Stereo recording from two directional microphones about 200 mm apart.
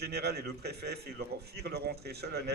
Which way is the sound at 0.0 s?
55° right (ahead or behind).